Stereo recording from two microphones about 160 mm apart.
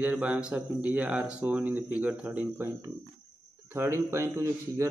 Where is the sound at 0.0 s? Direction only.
10° right (ahead or behind).